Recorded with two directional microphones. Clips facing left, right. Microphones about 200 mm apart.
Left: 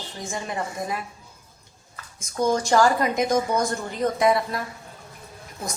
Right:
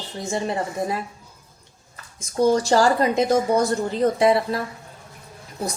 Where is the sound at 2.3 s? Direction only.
35° right (ahead or behind).